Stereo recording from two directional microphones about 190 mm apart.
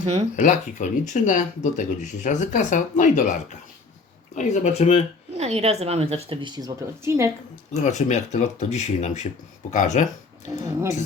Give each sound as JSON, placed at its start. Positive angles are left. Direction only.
{"t": 0.3, "sound": "speech", "side_deg": 40}
{"t": 5.4, "sound": "a woman's voice", "side_deg": -35}
{"t": 7.7, "sound": "speech", "side_deg": 40}
{"t": 10.5, "sound": "speech", "side_deg": -15}